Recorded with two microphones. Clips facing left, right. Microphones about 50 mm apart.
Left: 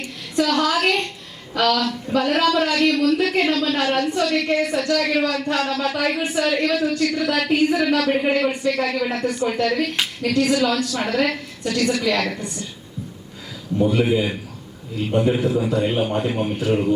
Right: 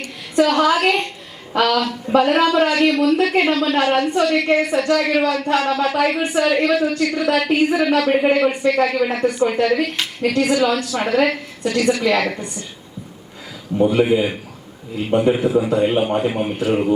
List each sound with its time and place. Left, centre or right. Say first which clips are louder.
0.4 s a man's voice: right 3 dB; centre
13.7 s a man's voice: right 3 dB; centre